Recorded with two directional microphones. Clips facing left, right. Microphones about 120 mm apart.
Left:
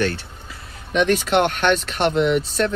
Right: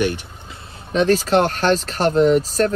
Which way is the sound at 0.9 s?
35° right (ahead or behind).